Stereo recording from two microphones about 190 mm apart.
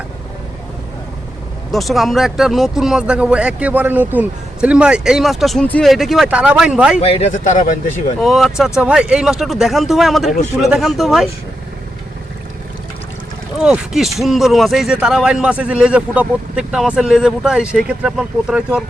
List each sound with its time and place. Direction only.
1.7 s speech: centre (ahead or behind)
7.0 s speech: 35° left (ahead or behind)
8.2 s speech: centre (ahead or behind)
13.6 s speech: 5° right (ahead or behind)